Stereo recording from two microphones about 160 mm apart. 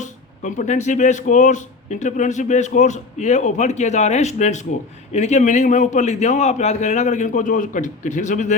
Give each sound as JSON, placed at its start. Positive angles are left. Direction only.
{"t": 0.0, "sound": "speech", "side_deg": 50}